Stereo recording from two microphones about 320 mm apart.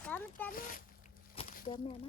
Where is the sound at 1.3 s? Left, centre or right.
Left.